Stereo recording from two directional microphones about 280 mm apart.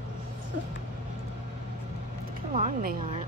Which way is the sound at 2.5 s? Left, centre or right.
Right.